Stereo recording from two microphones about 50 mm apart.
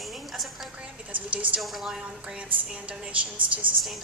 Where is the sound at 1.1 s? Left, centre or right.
Right.